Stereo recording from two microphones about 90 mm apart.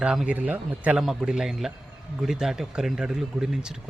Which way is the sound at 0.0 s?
10° right (ahead or behind).